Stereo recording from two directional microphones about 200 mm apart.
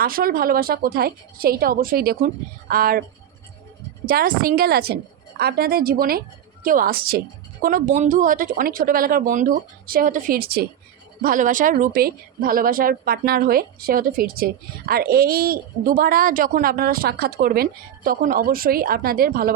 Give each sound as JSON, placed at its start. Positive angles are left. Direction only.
{"t": 0.0, "sound": "speech", "side_deg": -45}
{"t": 4.0, "sound": "speech", "side_deg": -50}